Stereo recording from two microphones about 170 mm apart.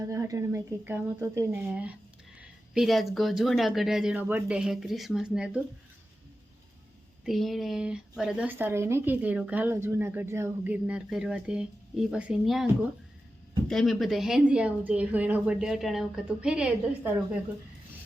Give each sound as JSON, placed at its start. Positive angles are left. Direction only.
{"t": 0.0, "sound": "speech", "side_deg": -15}
{"t": 7.3, "sound": "speech", "side_deg": 0}